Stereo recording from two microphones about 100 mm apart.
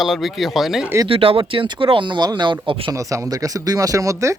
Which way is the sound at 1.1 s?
70° right (ahead or behind).